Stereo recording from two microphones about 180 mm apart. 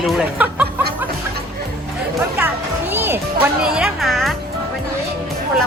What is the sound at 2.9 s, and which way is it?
Speech, 10° right (ahead or behind).